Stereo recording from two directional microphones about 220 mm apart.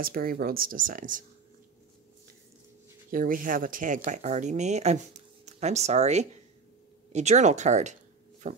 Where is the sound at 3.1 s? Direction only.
40° right (ahead or behind).